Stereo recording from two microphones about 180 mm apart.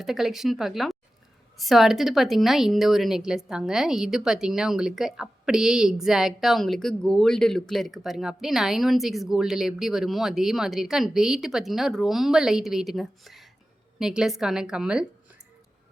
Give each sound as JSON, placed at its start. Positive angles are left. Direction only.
{"t": 0.0, "sound": "speech", "side_deg": 0}